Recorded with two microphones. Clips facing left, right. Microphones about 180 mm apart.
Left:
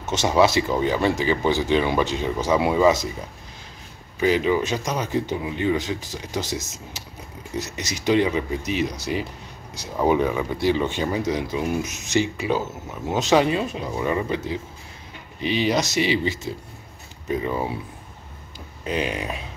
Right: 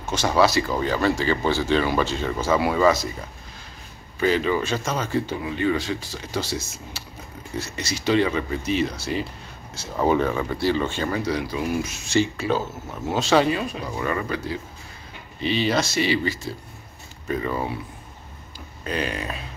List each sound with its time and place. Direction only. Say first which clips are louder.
0.0 s speech: left 1 dB; 20° left (ahead or behind)
4.2 s speech: left 1 dB; 15° left (ahead or behind)
18.9 s speech: left 2 dB; 15° left (ahead or behind)